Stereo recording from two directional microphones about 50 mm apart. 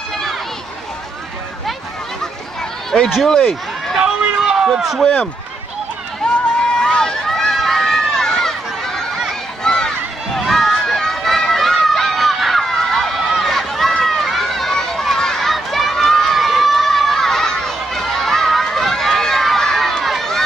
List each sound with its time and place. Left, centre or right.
2.9 s speech: centre
4.4 s run: centre
5.0 s speech: centre
6.2 s run: centre